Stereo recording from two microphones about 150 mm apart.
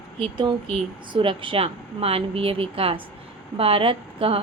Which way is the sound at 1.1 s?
35° right (ahead or behind).